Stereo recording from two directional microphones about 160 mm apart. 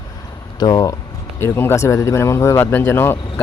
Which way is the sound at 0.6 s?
25° left (ahead or behind).